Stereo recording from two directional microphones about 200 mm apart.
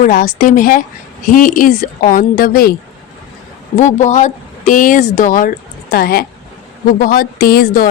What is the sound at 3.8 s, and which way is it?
Speech, 35° left (ahead or behind).